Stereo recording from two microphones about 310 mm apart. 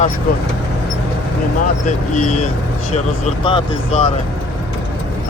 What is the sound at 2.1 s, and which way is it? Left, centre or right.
Speech, left.